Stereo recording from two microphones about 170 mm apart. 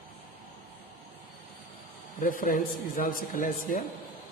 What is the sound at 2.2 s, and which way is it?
A man's voice, 55° left (ahead or behind).